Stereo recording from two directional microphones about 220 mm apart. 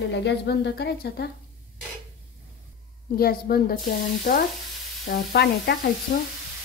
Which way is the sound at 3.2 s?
45° left (ahead or behind).